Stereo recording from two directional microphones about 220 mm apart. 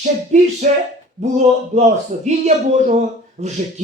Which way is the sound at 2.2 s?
30° right (ahead or behind).